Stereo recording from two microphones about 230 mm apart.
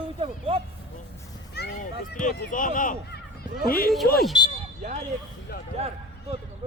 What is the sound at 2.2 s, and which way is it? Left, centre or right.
Speech, left.